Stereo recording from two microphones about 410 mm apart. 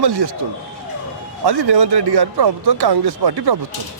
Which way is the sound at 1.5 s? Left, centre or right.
Right.